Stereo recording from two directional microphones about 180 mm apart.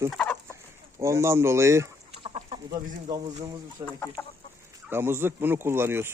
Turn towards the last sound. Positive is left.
turn(degrees=-10)  # may be behind; listen again after turning